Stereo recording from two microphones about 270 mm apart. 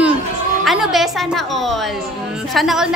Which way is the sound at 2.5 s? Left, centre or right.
Centre.